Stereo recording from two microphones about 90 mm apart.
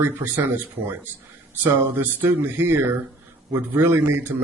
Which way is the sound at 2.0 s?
25° right (ahead or behind).